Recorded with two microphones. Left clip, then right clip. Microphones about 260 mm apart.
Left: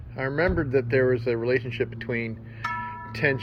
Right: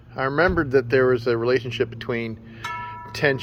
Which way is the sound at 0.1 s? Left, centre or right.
Centre.